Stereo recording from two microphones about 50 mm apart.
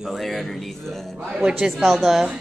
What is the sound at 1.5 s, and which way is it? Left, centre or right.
Speech, centre.